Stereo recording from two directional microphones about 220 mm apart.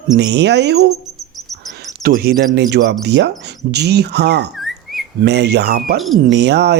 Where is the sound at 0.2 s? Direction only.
50° right (ahead or behind).